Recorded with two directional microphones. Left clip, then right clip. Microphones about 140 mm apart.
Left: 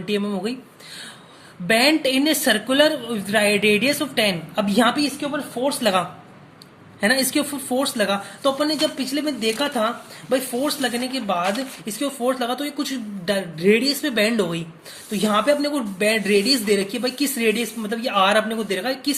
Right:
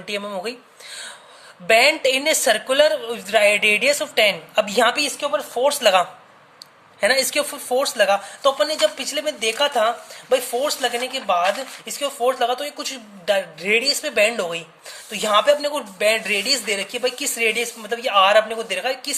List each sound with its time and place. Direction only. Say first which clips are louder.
0.0 s a woman's voice: left 1 dB; 35° right (ahead or behind)
1.6 s a woman's voice: right 2 dB; 35° right (ahead or behind)
5.0 s a woman's voice: right 3 dB; 55° right (ahead or behind); by 19.1 s 30° right (ahead or behind)